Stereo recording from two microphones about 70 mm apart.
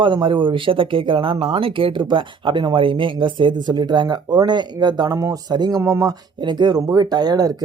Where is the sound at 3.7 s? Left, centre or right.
Right.